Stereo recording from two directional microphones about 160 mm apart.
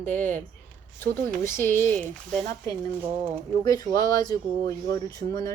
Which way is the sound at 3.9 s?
25° left (ahead or behind).